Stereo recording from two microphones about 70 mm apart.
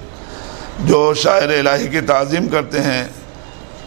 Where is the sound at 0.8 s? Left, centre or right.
Centre.